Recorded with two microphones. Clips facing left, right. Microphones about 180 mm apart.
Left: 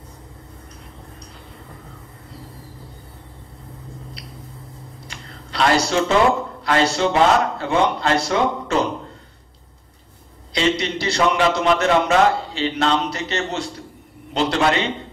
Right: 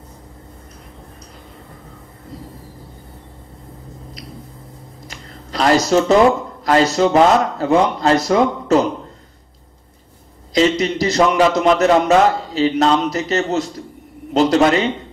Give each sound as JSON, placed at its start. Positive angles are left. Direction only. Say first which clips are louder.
{"t": 5.0, "sound": "a sound", "louder": "right 2 dB", "side_deg": -40}
{"t": 6.6, "sound": "a man's voice", "louder": "right 5 dB", "side_deg": -40}
{"t": 10.5, "sound": "a man's voice", "louder": "right 5 dB", "side_deg": -40}